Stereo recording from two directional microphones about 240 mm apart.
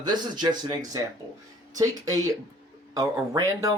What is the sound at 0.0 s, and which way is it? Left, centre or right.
Speech, centre.